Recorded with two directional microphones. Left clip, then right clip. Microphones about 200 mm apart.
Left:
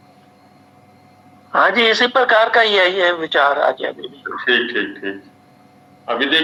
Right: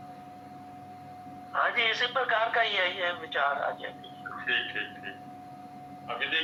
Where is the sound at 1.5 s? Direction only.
60° left (ahead or behind).